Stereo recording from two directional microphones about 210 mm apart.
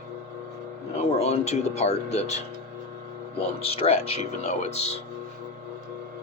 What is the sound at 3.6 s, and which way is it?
Speech, 30° left (ahead or behind).